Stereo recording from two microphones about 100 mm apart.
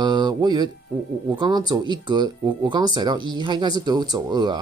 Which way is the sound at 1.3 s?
45° right (ahead or behind).